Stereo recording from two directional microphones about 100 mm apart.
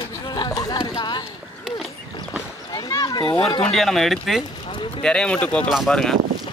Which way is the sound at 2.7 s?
40° left (ahead or behind).